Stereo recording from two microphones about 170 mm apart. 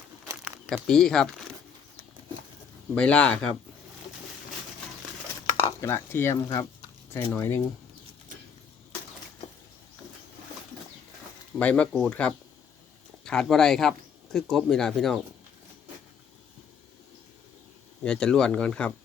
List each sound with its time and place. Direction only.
0.3 s a sound: 15° right (ahead or behind)
0.9 s speech: 5° left (ahead or behind)
2.9 s speech: 5° left (ahead or behind)
5.8 s speech: 15° left (ahead or behind)
11.6 s speech: 10° left (ahead or behind)
18.0 s speech: 5° left (ahead or behind)